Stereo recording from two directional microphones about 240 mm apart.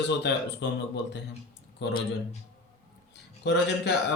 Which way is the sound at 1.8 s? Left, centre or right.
Left.